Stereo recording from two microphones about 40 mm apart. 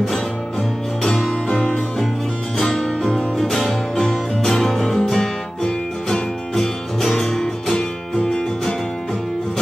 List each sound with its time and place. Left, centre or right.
1.0 s music: centre
1.5 s music: left
2.5 s music: centre